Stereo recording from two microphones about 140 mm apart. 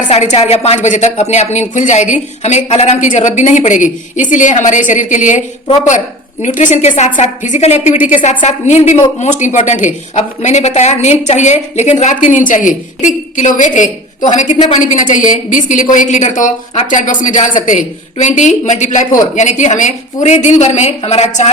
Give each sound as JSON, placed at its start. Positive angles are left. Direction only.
{"t": 0.1, "sound": "a woman's voice", "side_deg": 50}
{"t": 6.4, "sound": "a woman's voice", "side_deg": 65}